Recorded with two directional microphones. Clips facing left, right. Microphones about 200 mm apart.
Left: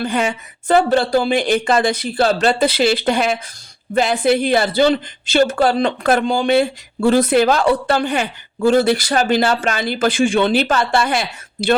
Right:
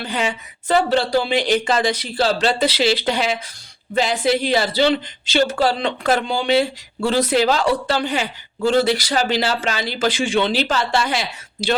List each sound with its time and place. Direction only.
0.0 s speech: 50° left (ahead or behind)